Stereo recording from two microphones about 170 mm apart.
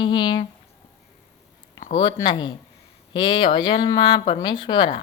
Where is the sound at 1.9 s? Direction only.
25° left (ahead or behind).